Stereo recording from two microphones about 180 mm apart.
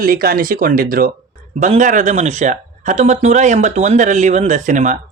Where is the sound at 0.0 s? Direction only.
55° right (ahead or behind).